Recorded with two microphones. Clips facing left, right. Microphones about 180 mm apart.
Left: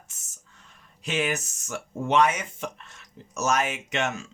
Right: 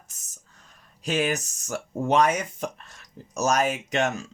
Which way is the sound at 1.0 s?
35° right (ahead or behind).